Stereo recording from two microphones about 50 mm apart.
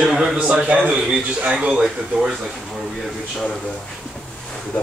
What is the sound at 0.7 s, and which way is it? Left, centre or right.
A man's voice, right.